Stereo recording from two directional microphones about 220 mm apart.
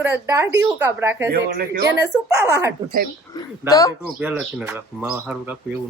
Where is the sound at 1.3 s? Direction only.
45° right (ahead or behind).